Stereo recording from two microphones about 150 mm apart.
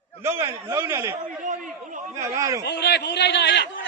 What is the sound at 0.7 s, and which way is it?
Speech, 20° right (ahead or behind).